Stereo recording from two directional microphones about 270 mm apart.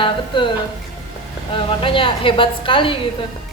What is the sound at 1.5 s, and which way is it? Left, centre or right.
A woman's voice, centre.